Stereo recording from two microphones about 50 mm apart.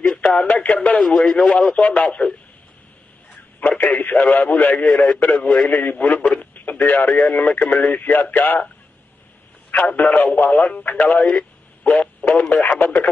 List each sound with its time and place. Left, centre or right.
0.2 s radio: centre
0.5 s speech: left
0.9 s speech: centre
3.6 s speech: left
4.8 s speech: centre
5.7 s speech: left
6.5 s radio: left
7.1 s speech: left
9.7 s speech: left
11.8 s a sound: left
12.3 s speech: left